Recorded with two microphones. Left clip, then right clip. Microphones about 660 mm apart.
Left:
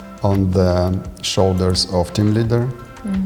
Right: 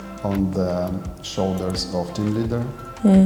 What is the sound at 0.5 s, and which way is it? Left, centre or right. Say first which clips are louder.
Speech: left 6 dB; left.